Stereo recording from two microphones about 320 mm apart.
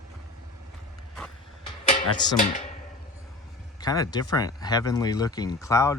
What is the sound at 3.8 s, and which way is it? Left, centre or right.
Speech, centre.